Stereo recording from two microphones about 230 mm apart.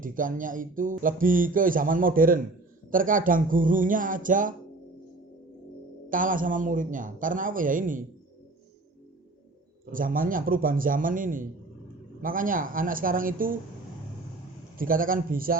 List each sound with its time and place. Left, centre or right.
0.0 s speech: right
6.1 s speech: right
9.9 s speech: right
14.8 s speech: right